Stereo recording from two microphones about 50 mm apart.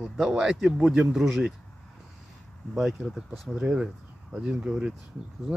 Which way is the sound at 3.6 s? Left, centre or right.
Centre.